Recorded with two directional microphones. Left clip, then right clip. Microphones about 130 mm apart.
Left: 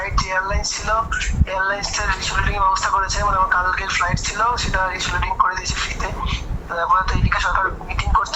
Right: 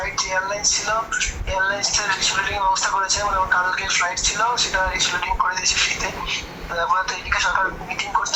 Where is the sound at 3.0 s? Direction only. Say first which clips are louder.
Left 2 dB; 25° left (ahead or behind).